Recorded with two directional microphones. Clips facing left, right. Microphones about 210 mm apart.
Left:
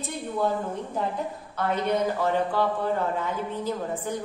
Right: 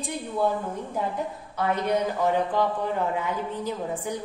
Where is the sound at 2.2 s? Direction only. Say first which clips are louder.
Right 1 dB; 15° right (ahead or behind).